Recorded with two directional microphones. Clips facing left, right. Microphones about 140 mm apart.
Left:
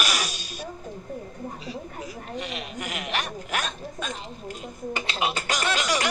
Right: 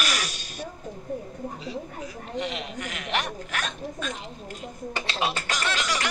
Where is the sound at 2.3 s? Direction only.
25° right (ahead or behind).